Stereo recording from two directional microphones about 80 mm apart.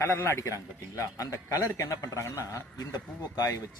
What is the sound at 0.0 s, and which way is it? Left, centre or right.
A man's voice, left.